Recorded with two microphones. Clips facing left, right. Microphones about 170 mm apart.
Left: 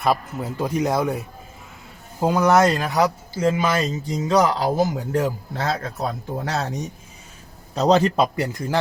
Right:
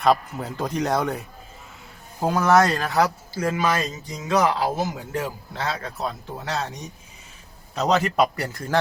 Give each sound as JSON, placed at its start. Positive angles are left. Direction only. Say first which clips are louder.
{"t": 0.0, "sound": "a man's voice", "louder": "right 1 dB", "side_deg": 5}
{"t": 2.2, "sound": "speech", "louder": "left 2 dB", "side_deg": 15}
{"t": 7.8, "sound": "speech", "louder": "left 3 dB", "side_deg": 30}